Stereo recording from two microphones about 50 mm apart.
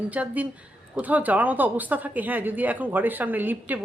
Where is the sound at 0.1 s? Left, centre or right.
Right.